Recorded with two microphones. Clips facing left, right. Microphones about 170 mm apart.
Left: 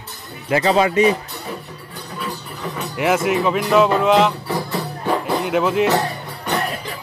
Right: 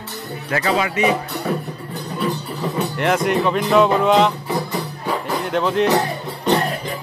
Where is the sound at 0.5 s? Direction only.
25° left (ahead or behind).